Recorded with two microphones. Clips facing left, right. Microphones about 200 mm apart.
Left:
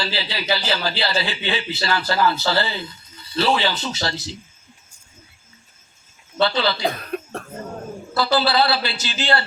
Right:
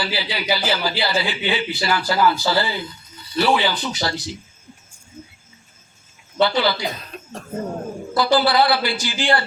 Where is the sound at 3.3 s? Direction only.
25° left (ahead or behind).